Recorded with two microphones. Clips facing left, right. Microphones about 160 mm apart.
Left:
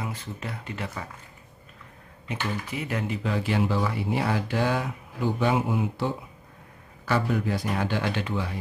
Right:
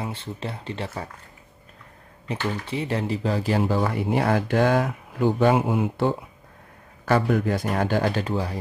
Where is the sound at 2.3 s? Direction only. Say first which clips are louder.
Right 4 dB; 30° right (ahead or behind).